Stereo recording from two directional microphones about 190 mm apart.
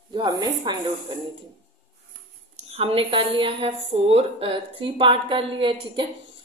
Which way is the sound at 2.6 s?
30° right (ahead or behind).